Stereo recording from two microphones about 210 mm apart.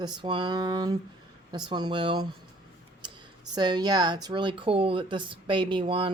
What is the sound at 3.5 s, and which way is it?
Speech, 20° right (ahead or behind).